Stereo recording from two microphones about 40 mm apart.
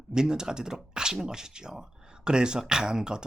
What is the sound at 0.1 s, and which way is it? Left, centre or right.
Speech, centre.